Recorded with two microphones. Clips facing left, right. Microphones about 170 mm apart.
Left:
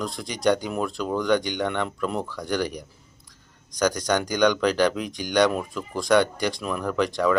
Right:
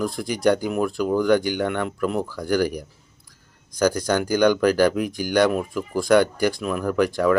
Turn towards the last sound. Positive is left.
turn(degrees=-5)  # may be behind; listen again after turning